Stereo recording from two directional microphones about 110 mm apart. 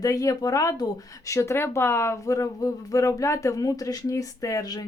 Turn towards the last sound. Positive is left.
turn(degrees=30)  # may be behind; listen again after turning